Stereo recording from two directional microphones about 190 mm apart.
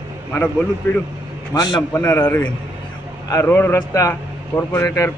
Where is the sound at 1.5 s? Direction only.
20° left (ahead or behind).